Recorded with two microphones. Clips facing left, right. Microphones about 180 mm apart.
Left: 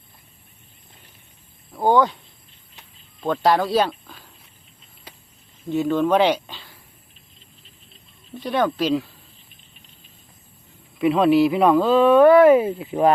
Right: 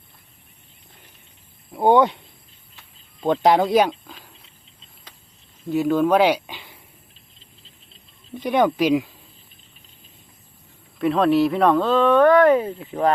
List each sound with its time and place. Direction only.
1.7 s speech: 25° right (ahead or behind)
5.6 s speech: 5° right (ahead or behind)
8.4 s speech: 15° right (ahead or behind)
10.9 s speech: centre (ahead or behind)